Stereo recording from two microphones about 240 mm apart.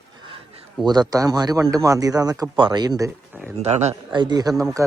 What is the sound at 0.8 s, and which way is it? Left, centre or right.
A man's voice, centre.